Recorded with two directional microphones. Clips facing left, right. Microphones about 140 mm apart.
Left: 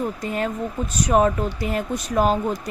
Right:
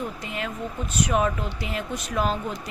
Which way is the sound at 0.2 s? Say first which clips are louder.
Left 6 dB; 40° left (ahead or behind).